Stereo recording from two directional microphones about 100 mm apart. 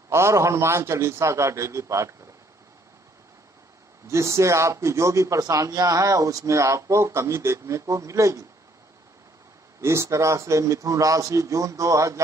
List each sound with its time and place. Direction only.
0.1 s a man's voice: 30° right (ahead or behind)
4.1 s a man's voice: 30° right (ahead or behind)
9.8 s a man's voice: 30° right (ahead or behind)